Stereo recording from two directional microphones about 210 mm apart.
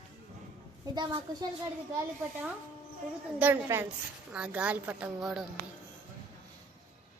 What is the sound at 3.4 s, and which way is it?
A woman's voice, 10° right (ahead or behind).